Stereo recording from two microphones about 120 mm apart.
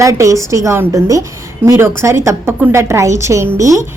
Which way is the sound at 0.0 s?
25° right (ahead or behind).